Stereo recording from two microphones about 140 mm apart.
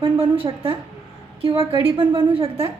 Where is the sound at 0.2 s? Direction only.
40° right (ahead or behind).